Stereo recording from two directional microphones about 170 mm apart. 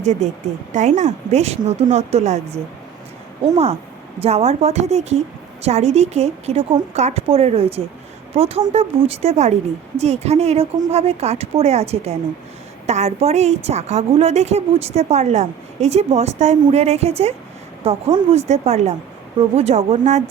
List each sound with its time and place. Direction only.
0.0 s a woman's voice: 45° right (ahead or behind)
4.2 s a woman's voice: 35° right (ahead or behind)